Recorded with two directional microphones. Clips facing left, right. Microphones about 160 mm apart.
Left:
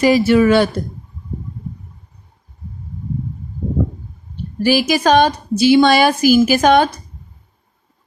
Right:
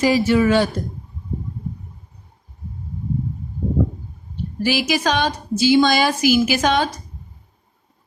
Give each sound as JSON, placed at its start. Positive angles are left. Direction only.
{"t": 0.0, "sound": "speech", "side_deg": 75}
{"t": 4.6, "sound": "a woman's voice", "side_deg": 50}
{"t": 6.2, "sound": "a woman's voice", "side_deg": 45}